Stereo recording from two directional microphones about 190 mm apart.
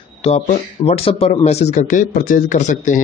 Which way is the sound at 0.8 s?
30° left (ahead or behind).